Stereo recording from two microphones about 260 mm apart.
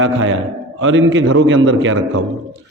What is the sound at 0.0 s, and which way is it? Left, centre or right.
A man's voice, right.